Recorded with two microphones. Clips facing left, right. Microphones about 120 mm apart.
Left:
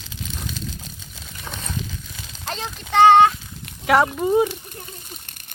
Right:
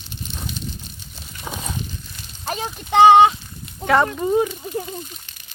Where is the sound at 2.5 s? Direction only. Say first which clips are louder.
Right 4 dB; 10° right (ahead or behind).